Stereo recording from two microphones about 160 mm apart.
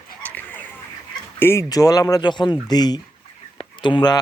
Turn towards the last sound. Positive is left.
turn(degrees=30)  # may be behind; listen again after turning